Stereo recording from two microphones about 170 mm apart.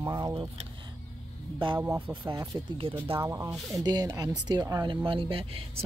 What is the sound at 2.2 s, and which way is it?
Speech, 20° right (ahead or behind).